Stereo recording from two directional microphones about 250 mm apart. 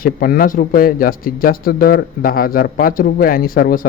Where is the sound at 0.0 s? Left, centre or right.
Left.